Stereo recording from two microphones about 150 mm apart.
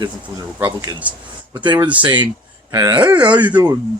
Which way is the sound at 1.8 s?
10° right (ahead or behind).